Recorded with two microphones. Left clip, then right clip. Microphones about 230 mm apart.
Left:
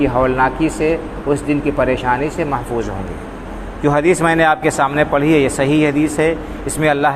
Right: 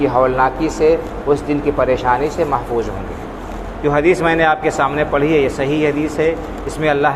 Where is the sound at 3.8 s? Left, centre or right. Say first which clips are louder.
Even; left.